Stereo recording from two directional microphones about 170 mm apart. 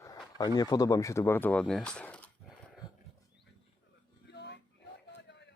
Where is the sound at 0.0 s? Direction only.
25° left (ahead or behind); by 2.3 s 5° left (ahead or behind).